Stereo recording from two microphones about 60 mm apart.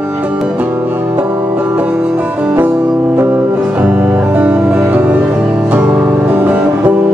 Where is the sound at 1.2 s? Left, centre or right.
Right.